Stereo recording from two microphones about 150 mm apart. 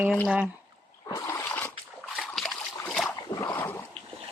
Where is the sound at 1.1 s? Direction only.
20° left (ahead or behind).